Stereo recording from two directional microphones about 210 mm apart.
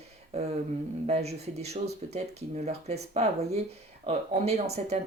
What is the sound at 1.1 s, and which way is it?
Speech, 30° right (ahead or behind).